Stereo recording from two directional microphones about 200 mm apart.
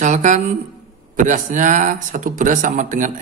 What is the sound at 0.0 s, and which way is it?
Speech, 40° right (ahead or behind).